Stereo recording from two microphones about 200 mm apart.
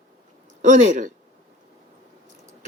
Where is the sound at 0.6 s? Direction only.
40° right (ahead or behind).